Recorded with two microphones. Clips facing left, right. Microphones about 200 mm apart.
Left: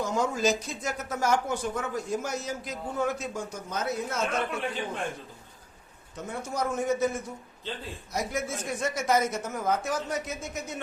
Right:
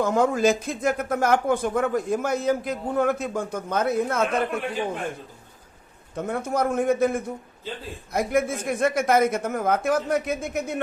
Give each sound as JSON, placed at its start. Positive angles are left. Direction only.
{"t": 0.0, "sound": "speech", "side_deg": -55}
{"t": 6.1, "sound": "speech", "side_deg": -55}